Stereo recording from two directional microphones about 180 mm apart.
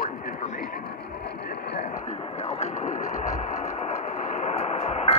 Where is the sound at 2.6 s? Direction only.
40° left (ahead or behind).